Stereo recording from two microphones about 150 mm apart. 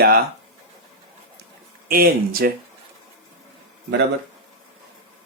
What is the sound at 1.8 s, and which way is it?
Speech, 80° right.